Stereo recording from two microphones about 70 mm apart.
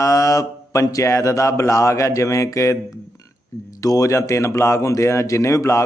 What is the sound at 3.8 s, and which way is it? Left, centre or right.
A man's voice, left.